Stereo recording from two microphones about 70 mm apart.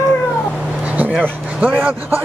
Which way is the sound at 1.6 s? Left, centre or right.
Right.